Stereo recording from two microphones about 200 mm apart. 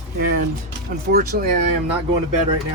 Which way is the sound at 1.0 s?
50° right (ahead or behind).